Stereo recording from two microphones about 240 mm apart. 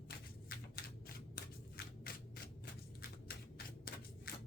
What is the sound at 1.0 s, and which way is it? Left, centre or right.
Scissors, left.